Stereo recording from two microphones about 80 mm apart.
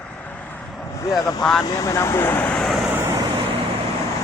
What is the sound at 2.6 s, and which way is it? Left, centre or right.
Vehicle, centre.